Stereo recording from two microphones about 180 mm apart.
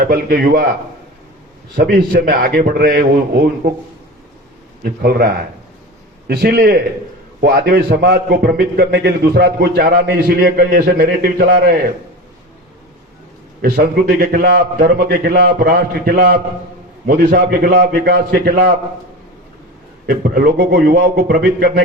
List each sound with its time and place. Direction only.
0.0 s a man's voice: 60° right (ahead or behind)
1.7 s a man's voice: 55° right (ahead or behind)
4.8 s a man's voice: 55° right (ahead or behind)
13.6 s a man's voice: 55° right (ahead or behind)
20.1 s a man's voice: 60° right (ahead or behind)